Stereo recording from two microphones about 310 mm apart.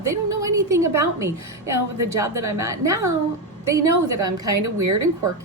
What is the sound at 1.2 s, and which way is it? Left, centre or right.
Speech, right.